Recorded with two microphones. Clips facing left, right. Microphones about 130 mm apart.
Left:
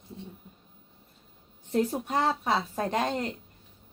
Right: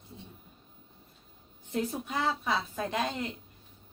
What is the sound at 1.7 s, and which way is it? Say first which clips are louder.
A woman's voice: left 6 dB; 40° left (ahead or behind).